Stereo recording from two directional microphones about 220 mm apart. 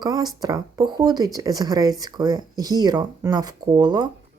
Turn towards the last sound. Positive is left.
turn(degrees=-20)  # may be behind; listen again after turning